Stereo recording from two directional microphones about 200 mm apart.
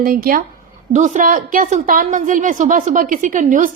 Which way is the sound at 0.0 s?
45° right (ahead or behind).